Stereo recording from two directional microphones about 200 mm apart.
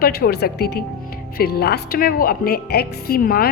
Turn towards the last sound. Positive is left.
turn(degrees=50)  # may be behind; listen again after turning